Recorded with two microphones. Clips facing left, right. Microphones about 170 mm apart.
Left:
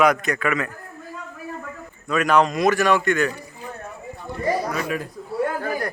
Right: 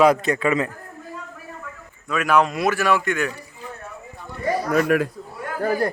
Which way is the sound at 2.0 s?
5° right (ahead or behind).